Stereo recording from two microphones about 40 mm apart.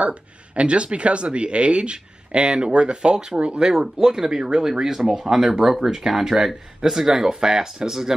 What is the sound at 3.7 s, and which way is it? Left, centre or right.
Speech, centre.